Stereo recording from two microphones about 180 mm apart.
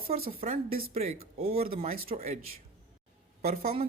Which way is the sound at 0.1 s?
35° right (ahead or behind).